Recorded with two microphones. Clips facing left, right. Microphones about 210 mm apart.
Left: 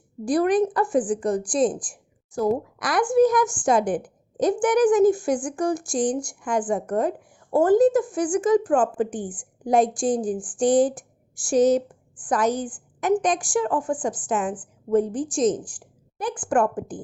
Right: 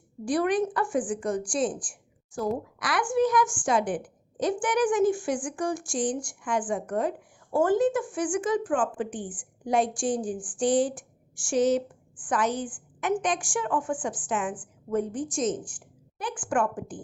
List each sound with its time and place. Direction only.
0.3 s speech: 40° left (ahead or behind)